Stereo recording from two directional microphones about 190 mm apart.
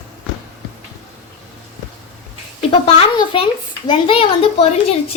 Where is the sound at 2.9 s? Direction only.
30° left (ahead or behind).